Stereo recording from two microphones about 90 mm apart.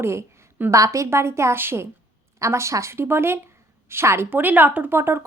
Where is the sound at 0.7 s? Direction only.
35° right (ahead or behind).